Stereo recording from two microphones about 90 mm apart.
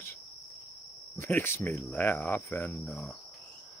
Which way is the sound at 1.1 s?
25° left (ahead or behind).